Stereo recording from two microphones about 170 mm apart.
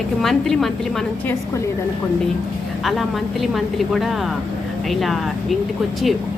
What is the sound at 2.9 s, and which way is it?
A woman's voice, centre (ahead or behind).